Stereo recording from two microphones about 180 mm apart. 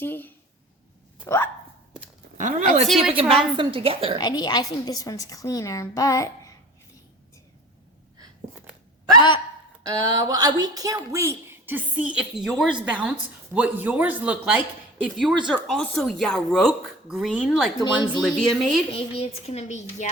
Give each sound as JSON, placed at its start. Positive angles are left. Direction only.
{"t": 0.0, "sound": "a woman's voice", "side_deg": 10}
{"t": 2.4, "sound": "speech", "side_deg": -45}
{"t": 2.8, "sound": "speech", "side_deg": 0}
{"t": 3.2, "sound": "a woman's voice", "side_deg": -30}
{"t": 4.2, "sound": "a woman's voice", "side_deg": 25}
{"t": 9.8, "sound": "speech", "side_deg": -20}
{"t": 17.8, "sound": "a woman's voice", "side_deg": 25}
{"t": 18.2, "sound": "speech", "side_deg": 0}
{"t": 18.9, "sound": "a child's voice", "side_deg": 35}